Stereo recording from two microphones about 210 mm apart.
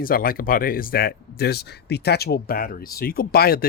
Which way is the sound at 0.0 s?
45° left (ahead or behind).